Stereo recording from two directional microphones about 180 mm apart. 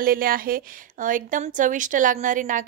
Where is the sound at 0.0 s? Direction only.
55° right (ahead or behind).